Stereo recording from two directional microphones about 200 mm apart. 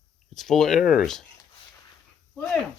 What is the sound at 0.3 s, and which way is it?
Speech, centre (ahead or behind).